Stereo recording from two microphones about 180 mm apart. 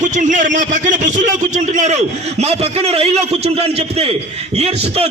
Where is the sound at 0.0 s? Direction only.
45° right (ahead or behind).